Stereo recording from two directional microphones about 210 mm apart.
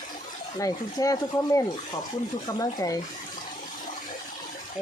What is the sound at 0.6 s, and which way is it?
Speech, 15° left (ahead or behind).